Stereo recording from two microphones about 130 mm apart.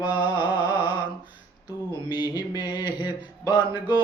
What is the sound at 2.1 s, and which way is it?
Mantra, 30° left (ahead or behind).